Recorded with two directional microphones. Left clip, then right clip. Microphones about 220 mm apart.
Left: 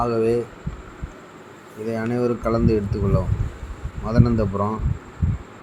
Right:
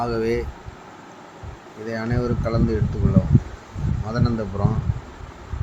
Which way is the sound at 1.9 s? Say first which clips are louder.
Left 3 dB; centre (ahead or behind).